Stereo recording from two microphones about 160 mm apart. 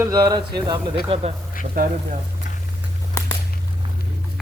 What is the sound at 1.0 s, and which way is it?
Speech, 35° right (ahead or behind).